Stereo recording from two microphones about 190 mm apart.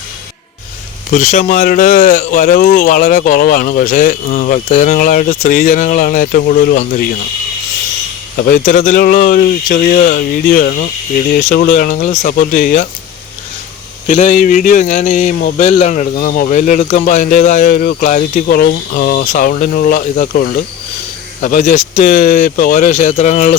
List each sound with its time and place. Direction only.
1.1 s speech: 40° left (ahead or behind)
8.4 s speech: 45° left (ahead or behind)
14.1 s speech: 40° left (ahead or behind)